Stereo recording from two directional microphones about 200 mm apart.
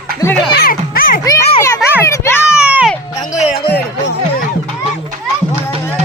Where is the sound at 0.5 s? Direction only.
50° left (ahead or behind).